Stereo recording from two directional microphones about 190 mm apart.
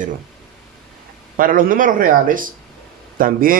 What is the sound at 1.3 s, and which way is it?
Speech, 45° right (ahead or behind).